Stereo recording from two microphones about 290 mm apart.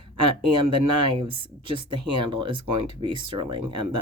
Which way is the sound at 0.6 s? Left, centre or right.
Centre.